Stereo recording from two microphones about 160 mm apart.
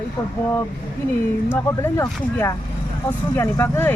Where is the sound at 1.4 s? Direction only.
15° left (ahead or behind).